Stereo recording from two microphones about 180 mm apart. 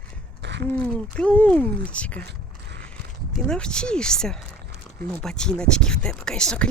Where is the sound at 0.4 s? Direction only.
70° right (ahead or behind).